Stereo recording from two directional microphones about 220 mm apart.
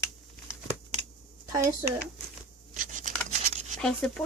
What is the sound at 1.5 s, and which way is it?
Speech, 15° right (ahead or behind).